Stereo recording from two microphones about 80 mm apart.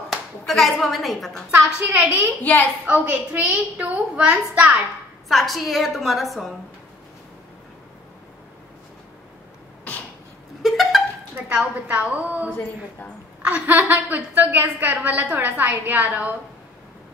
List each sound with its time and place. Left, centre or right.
0.1 s speech: centre
1.9 s a woman's voice: right
2.4 s a woman's voice: left
2.9 s a woman's voice: centre
5.3 s a woman's voice: centre
10.6 s a sound: centre
11.7 s a woman's voice: centre